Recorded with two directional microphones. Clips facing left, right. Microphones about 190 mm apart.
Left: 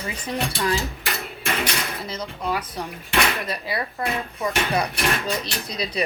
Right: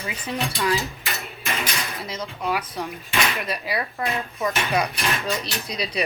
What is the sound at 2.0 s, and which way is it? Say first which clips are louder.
Speech: right 2 dB; 30° left (ahead or behind).